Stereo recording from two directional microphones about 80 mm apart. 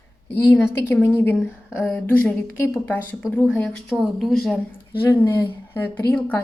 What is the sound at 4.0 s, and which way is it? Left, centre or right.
Speech, centre.